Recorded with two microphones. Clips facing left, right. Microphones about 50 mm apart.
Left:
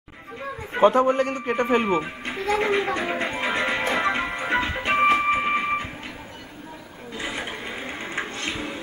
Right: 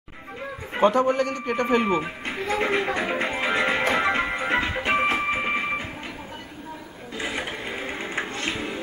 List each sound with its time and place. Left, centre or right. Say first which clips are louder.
0.7 s a man's voice: left 2 dB; centre
2.0 s music: even; centre
7.2 s sewing machine: right 1 dB; centre